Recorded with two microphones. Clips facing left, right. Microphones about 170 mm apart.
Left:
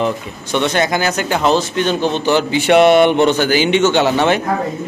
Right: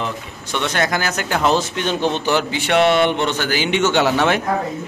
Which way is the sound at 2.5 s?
10° left (ahead or behind).